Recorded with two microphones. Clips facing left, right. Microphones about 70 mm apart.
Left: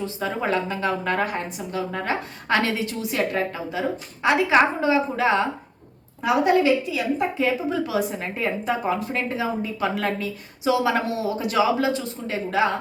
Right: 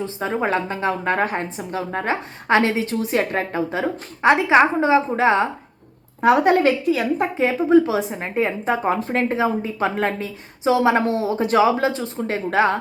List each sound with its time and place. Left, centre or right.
0.0 s a woman's voice: right
2.8 s a woman's voice: right
6.2 s a woman's voice: right
7.4 s a woman's voice: right